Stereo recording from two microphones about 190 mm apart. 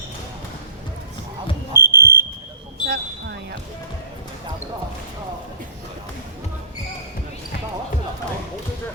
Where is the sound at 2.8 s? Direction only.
60° right (ahead or behind).